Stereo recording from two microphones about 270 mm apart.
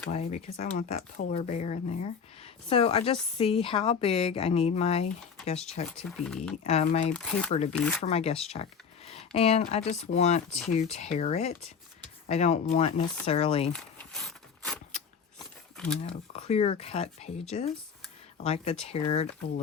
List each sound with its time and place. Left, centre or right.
0.1 s speech: left
6.1 s speech: centre
6.7 s speech: left
7.1 s speech: centre
7.5 s speech: left
7.8 s speech: centre
8.0 s speech: left
13.7 s a sound: centre
16.0 s speech: left